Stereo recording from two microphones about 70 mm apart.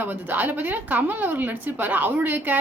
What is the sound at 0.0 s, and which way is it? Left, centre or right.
A woman's voice, right.